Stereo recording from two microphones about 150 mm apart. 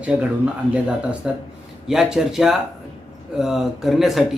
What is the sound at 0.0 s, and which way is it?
Speech, 10° right (ahead or behind).